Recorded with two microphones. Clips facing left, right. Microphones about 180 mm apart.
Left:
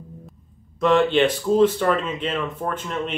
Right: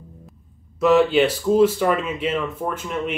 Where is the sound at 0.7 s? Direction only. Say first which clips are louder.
Right 2 dB; 5° right (ahead or behind).